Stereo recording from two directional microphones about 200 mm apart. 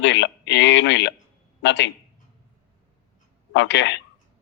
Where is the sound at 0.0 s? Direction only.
60° left (ahead or behind).